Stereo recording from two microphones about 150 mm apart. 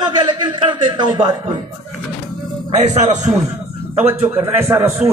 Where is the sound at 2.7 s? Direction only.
50° right (ahead or behind).